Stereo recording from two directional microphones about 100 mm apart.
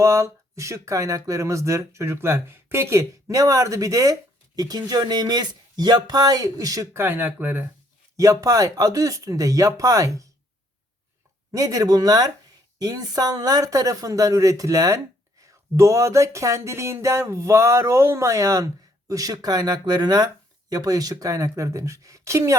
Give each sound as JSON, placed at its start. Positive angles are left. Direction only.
{"t": 0.0, "sound": "speech", "side_deg": -30}
{"t": 6.9, "sound": "speech", "side_deg": -20}
{"t": 8.1, "sound": "speech", "side_deg": -35}
{"t": 11.5, "sound": "speech", "side_deg": -35}